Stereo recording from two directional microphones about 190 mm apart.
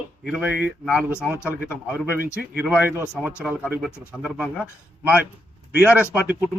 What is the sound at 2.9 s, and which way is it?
Speech, 15° right (ahead or behind).